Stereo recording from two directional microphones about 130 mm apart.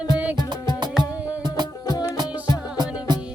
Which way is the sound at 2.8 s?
30° right (ahead or behind).